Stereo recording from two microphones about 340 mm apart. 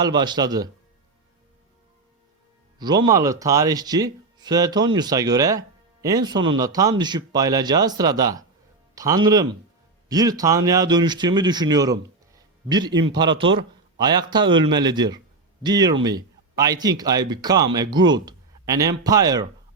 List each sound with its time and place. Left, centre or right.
0.0 s speech: centre
2.7 s speech: centre
13.2 s a man's voice: right
14.0 s speech: centre
14.4 s speech: right
14.7 s speech: centre